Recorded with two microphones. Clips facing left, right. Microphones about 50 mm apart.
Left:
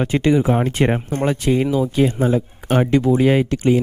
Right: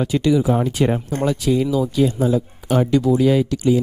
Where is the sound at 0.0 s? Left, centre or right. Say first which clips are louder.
Left 1 dB; left.